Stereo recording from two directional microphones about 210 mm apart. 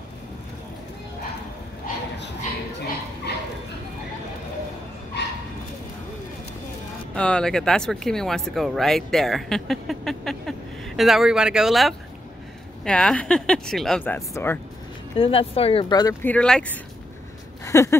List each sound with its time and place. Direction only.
2.1 s dog: 55° left (ahead or behind)
5.2 s bow-wow: 55° left (ahead or behind)
7.2 s speech: 5° left (ahead or behind)
15.1 s speech: 25° left (ahead or behind); by 16.8 s 5° left (ahead or behind)
17.6 s a sound: 15° left (ahead or behind)